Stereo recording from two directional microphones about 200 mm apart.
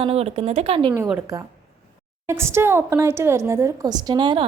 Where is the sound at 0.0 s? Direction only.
30° right (ahead or behind).